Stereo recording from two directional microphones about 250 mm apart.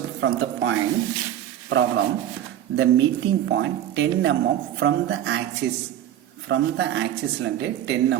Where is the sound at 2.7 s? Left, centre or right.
Right.